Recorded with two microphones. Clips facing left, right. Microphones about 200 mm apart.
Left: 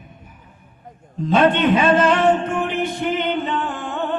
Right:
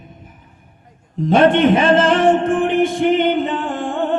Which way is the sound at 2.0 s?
50° right (ahead or behind).